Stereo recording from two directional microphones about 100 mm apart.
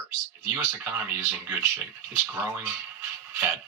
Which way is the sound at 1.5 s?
20° right (ahead or behind).